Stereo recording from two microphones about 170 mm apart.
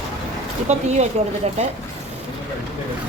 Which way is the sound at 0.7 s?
40° right (ahead or behind).